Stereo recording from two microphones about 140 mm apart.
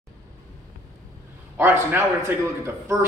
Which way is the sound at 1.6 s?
15° right (ahead or behind).